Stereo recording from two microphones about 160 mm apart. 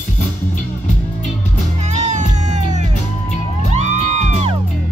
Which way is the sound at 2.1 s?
45° right (ahead or behind).